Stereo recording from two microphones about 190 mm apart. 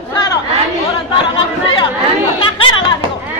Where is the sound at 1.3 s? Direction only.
25° left (ahead or behind).